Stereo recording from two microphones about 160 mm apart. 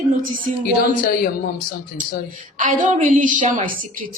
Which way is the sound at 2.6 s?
50° right (ahead or behind).